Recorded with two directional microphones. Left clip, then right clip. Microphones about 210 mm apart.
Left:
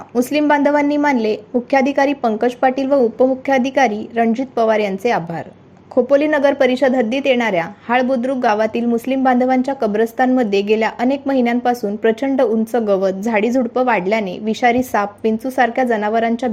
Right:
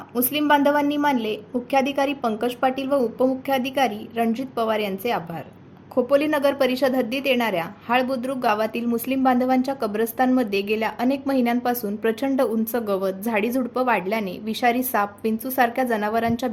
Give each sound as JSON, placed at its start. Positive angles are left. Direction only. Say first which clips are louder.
{"t": 0.1, "sound": "a woman's voice", "louder": "left 5 dB", "side_deg": 20}